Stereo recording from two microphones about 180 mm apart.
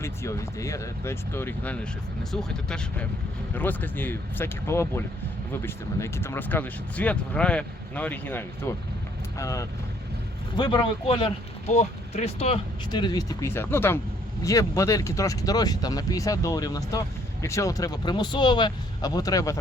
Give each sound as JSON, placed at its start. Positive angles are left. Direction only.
{"t": 0.0, "sound": "speech", "side_deg": 15}